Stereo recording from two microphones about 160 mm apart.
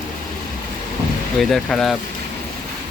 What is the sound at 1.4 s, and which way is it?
Speech, centre (ahead or behind).